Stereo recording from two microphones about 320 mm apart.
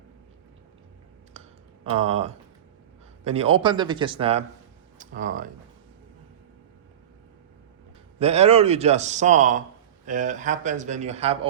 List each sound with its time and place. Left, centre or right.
1.8 s speech: centre
8.2 s speech: centre